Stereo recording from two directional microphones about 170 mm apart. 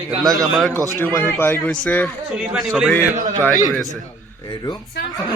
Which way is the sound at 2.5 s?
5° right (ahead or behind).